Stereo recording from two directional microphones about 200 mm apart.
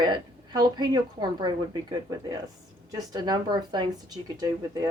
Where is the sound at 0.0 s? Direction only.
20° right (ahead or behind).